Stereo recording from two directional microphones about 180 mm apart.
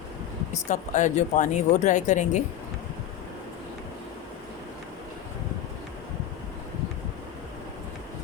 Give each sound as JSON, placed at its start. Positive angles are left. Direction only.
{"t": 0.5, "sound": "speech", "side_deg": 40}